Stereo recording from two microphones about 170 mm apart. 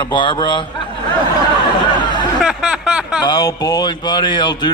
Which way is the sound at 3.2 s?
25° left (ahead or behind).